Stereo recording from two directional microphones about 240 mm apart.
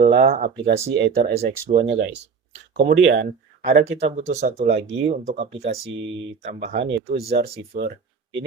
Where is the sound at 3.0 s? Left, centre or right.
Right.